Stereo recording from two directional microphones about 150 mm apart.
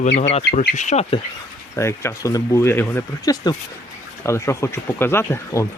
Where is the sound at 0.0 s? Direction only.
50° left (ahead or behind).